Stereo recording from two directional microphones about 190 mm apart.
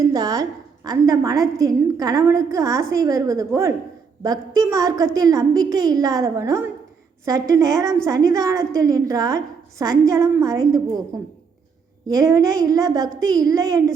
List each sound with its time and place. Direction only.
0.0 s a woman's voice: 20° right (ahead or behind)
12.0 s a woman's voice: 20° right (ahead or behind)